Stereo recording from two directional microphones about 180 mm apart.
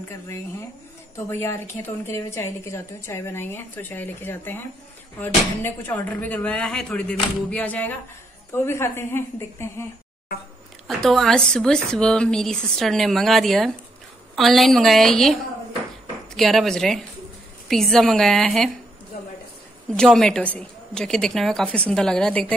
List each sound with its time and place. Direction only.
0.1 s a woman's voice: 15° left (ahead or behind)
11.0 s speech: centre (ahead or behind)
16.3 s speech: centre (ahead or behind)
19.9 s speech: centre (ahead or behind)